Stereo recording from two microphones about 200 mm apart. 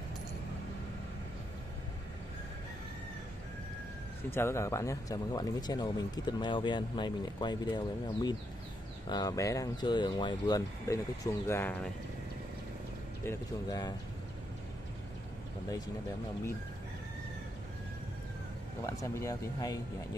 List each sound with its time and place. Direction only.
4.3 s speech: 15° left (ahead or behind)
13.2 s speech: 15° left (ahead or behind)
18.9 s speech: 15° left (ahead or behind)